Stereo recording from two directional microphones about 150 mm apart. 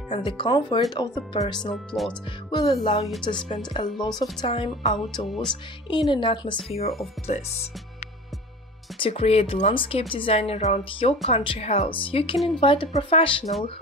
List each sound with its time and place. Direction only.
0.1 s speech: 35° left (ahead or behind)
1.9 s speech: 5° left (ahead or behind)
2.8 s speech: 30° left (ahead or behind)
5.3 s speech: 5° left (ahead or behind)
5.9 s speech: 30° left (ahead or behind)
7.3 s speech: 50° left (ahead or behind)
9.0 s speech: 45° left (ahead or behind)